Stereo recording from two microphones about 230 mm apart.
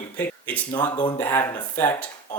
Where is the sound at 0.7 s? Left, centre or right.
Centre.